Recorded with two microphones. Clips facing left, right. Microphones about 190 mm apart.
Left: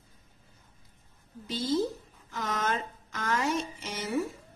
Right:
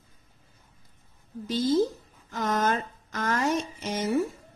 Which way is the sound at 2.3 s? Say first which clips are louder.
Right 5 dB; 45° right (ahead or behind).